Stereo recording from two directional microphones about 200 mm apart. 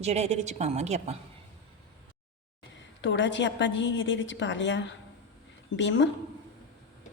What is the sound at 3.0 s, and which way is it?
A woman's voice, 65° left (ahead or behind).